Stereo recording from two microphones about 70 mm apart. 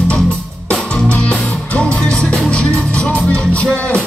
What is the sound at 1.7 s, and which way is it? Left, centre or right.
Music, centre.